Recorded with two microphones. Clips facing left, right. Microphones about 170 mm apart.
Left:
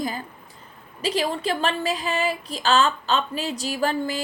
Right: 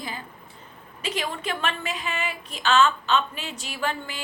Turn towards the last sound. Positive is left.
turn(degrees=40)  # may be behind; listen again after turning